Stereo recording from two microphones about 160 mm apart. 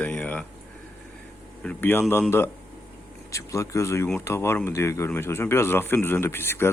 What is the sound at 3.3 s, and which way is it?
Speech, 20° left (ahead or behind).